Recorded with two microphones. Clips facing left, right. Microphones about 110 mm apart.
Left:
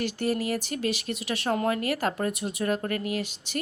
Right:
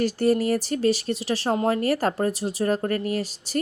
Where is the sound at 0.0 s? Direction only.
40° right (ahead or behind).